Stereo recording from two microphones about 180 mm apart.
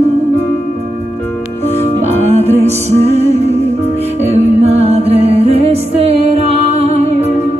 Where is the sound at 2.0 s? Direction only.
35° right (ahead or behind).